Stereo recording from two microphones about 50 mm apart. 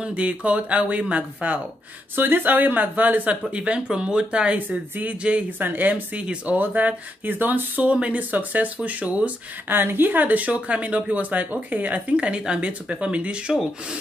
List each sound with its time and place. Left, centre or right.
0.0 s speech: right
2.1 s speech: right
3.4 s speech: right
4.6 s speech: right
7.9 s speech: right
8.2 s speech: right
9.7 s speech: right